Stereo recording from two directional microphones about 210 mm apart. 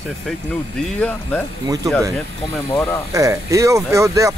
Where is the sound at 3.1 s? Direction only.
15° right (ahead or behind).